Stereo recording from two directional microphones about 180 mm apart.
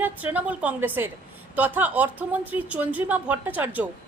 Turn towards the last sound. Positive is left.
turn(degrees=-10)  # may be behind; listen again after turning